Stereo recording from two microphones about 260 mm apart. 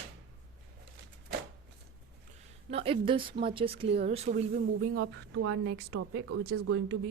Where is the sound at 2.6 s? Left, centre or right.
Right.